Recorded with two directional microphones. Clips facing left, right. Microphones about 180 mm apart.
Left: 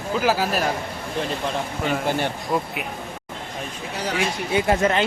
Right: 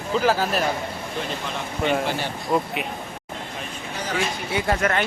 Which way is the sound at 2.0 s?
55° left (ahead or behind).